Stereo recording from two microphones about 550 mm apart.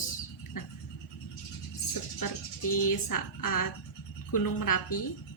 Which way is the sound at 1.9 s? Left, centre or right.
Left.